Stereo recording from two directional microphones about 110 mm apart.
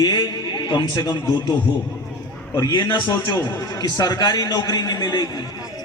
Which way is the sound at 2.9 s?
45° left (ahead or behind).